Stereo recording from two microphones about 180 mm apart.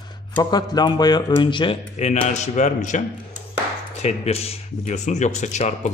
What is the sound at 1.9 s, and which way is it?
Speech, 40° left (ahead or behind).